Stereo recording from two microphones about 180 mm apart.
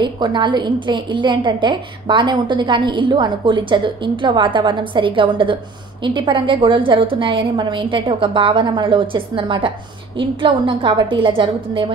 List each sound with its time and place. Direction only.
0.0 s a woman's voice: 25° right (ahead or behind)